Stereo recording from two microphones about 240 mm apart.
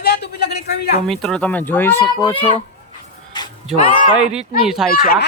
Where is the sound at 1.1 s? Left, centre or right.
Centre.